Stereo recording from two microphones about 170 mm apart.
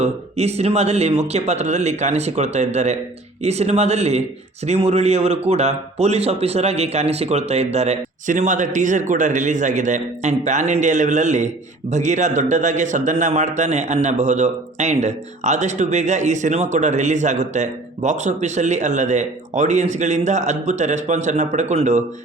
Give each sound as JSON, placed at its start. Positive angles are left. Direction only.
{"t": 0.0, "sound": "a man's voice", "side_deg": -40}